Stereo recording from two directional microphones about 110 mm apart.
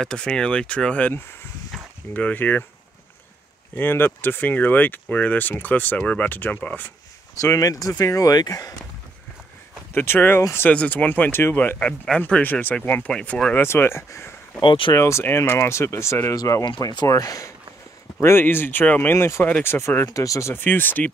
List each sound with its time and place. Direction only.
0.0 s speech: 5° left (ahead or behind)
3.7 s speech: 20° left (ahead or behind)
7.3 s speech: 30° left (ahead or behind)
9.9 s speech: 20° left (ahead or behind)
10.7 s speech: 10° left (ahead or behind)
14.6 s speech: 50° left (ahead or behind)
15.0 s speech: 25° left (ahead or behind); by 17.1 s 40° left (ahead or behind)
17.1 s speech: 30° left (ahead or behind)
18.2 s speech: 20° left (ahead or behind)
20.1 s speech: 30° left (ahead or behind)